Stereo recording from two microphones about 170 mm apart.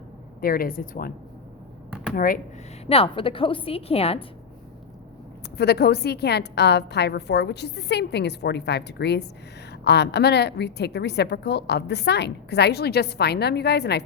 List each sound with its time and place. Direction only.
0.4 s a woman's voice: 60° left (ahead or behind)
2.1 s a woman's voice: 55° left (ahead or behind)
2.8 s a woman's voice: 35° left (ahead or behind)
5.5 s a woman's voice: 70° left (ahead or behind)